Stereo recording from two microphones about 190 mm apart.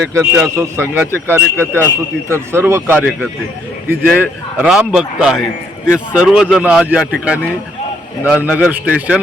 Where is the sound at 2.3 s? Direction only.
15° right (ahead or behind).